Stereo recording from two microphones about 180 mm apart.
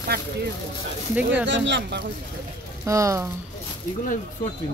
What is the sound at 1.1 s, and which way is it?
Speech, 10° right (ahead or behind).